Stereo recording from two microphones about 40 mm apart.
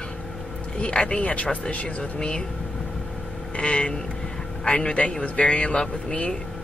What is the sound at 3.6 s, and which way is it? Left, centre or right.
A man's voice, left.